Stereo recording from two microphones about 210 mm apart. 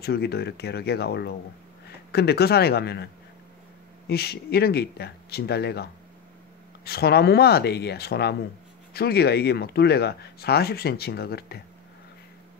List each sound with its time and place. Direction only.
0.0 s speech: 50° left (ahead or behind)
4.1 s speech: 50° left (ahead or behind)